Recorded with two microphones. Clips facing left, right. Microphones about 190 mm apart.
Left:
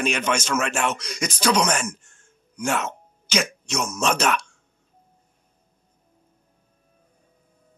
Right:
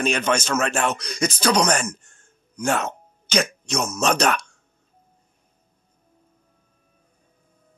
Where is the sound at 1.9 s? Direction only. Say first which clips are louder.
Right 4 dB; 35° right (ahead or behind).